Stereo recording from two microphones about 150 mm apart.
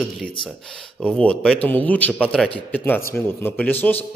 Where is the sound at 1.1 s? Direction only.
5° left (ahead or behind).